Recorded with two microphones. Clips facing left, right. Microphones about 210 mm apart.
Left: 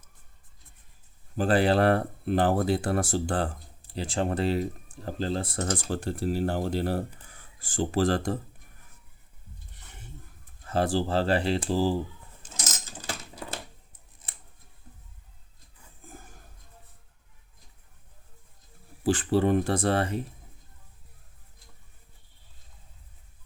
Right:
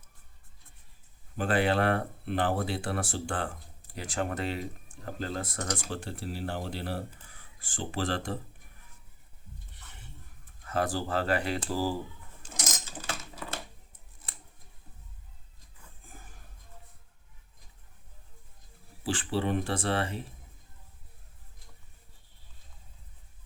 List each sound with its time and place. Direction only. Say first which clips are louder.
1.4 s speech: left 4 dB; 35° left (ahead or behind)
10.6 s speech: left 4 dB; 30° left (ahead or behind)
16.0 s a sound: left 6 dB; 45° left (ahead or behind)
19.0 s speech: left 7 dB; 40° left (ahead or behind)